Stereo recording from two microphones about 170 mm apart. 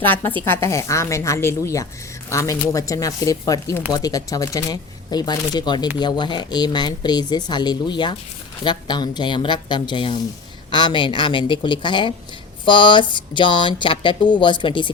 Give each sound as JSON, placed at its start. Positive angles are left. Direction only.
{"t": 0.0, "sound": "a woman's voice", "side_deg": 10}